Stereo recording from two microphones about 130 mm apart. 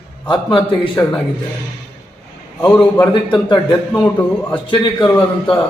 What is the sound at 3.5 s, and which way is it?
Speech, 35° left (ahead or behind).